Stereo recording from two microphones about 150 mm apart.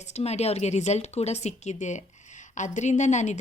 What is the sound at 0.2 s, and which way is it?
A woman's voice, 45° left (ahead or behind).